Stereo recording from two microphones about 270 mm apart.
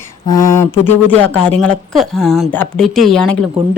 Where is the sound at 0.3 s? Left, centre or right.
Centre.